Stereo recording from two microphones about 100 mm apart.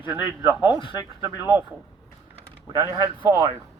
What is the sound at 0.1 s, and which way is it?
Speech, 10° right (ahead or behind).